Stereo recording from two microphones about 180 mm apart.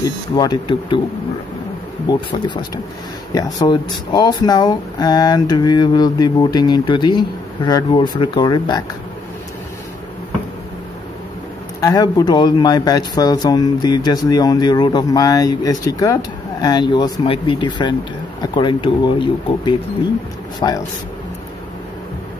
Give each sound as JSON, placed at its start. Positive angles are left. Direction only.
{"t": 0.0, "sound": "speech", "side_deg": 25}
{"t": 2.0, "sound": "speech", "side_deg": 25}
{"t": 11.8, "sound": "speech", "side_deg": 20}